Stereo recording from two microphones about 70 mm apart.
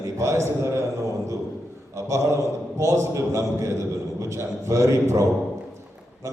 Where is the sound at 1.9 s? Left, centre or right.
Right.